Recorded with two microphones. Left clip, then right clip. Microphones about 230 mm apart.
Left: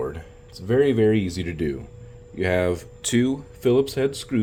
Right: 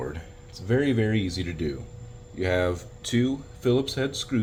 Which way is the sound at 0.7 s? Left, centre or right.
Left.